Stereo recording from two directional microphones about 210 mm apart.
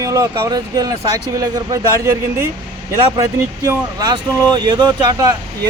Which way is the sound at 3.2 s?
15° right (ahead or behind).